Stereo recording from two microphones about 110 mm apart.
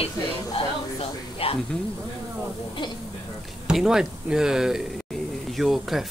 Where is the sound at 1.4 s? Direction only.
60° left (ahead or behind).